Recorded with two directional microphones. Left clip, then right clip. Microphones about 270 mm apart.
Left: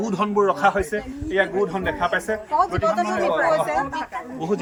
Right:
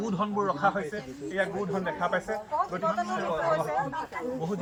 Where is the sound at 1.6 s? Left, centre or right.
Left.